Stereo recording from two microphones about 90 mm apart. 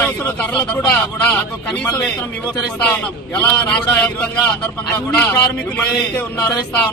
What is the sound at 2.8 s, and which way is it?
Speech, 15° left (ahead or behind).